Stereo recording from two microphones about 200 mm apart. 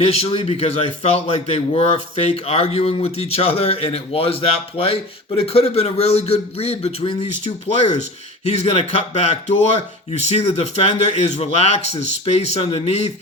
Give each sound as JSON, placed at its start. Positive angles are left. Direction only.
{"t": 0.0, "sound": "a man's voice", "side_deg": 30}
{"t": 8.5, "sound": "speech", "side_deg": 30}